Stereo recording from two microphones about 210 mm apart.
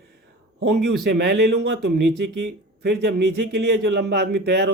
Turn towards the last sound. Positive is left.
turn(degrees=-50)  # may be behind; listen again after turning